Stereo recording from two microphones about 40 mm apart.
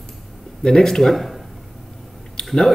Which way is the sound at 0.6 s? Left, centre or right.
Centre.